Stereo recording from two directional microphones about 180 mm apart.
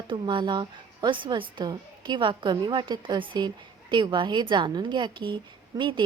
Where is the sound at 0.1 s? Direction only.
25° right (ahead or behind).